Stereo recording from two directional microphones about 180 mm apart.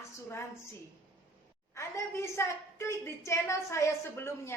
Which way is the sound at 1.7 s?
15° left (ahead or behind).